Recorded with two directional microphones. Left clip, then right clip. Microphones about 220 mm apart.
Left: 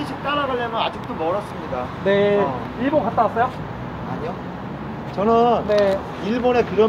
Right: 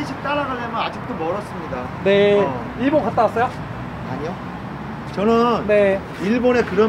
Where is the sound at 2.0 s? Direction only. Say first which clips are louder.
Right 3 dB; centre (ahead or behind).